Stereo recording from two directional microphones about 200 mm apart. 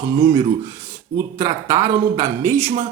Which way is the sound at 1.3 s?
15° right (ahead or behind).